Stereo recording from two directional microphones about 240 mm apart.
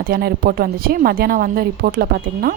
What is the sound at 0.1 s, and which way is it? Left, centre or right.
Speech, right.